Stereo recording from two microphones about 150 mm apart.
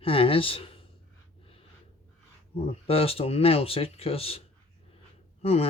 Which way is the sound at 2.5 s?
40° left (ahead or behind).